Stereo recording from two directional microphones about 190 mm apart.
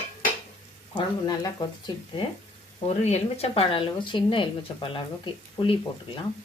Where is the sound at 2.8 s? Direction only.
35° left (ahead or behind).